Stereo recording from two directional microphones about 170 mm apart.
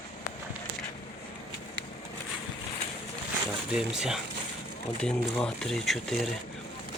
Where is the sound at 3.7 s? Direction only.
5° right (ahead or behind).